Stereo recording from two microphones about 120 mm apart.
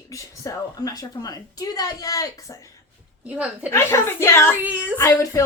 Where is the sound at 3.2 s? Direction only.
10° right (ahead or behind).